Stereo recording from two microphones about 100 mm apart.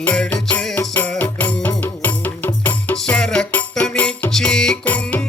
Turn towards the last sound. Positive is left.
turn(degrees=15)  # may be behind; listen again after turning